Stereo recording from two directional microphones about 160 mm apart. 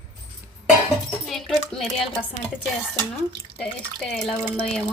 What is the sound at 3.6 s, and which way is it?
A woman's voice, 5° left (ahead or behind).